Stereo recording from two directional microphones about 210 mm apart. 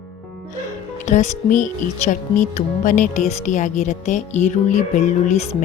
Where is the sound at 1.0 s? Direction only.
35° left (ahead or behind).